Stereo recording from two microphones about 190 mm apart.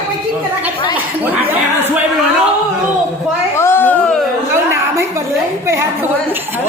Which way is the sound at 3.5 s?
15° left (ahead or behind).